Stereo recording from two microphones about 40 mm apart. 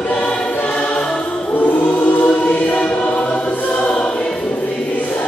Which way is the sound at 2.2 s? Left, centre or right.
Left.